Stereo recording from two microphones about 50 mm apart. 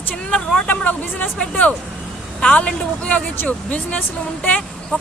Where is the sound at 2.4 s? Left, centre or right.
Left.